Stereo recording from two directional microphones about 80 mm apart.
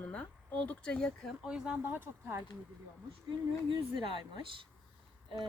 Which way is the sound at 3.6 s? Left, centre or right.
Right.